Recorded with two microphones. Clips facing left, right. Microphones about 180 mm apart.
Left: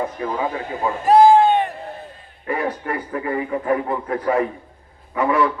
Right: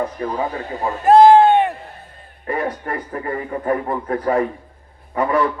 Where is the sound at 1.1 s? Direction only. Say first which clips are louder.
Right 3 dB; 60° right (ahead or behind).